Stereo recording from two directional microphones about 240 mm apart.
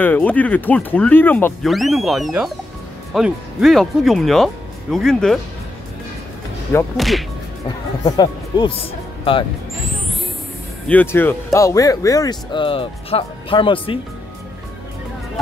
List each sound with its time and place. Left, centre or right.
0.0 s speech: centre
7.0 s speech: centre
8.0 s speech: centre
10.9 s speech: centre